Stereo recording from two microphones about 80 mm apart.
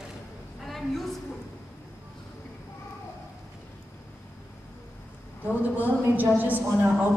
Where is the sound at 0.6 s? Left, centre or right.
Centre.